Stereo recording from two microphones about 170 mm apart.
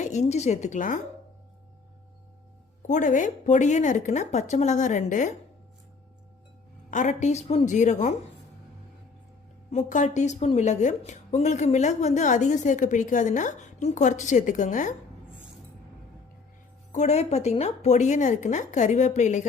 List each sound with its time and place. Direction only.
0.0 s a woman's voice: 40° left (ahead or behind)
2.8 s a woman's voice: 45° left (ahead or behind)
6.9 s a woman's voice: 45° left (ahead or behind)
9.7 s a woman's voice: 45° left (ahead or behind)
16.9 s a woman's voice: 40° left (ahead or behind)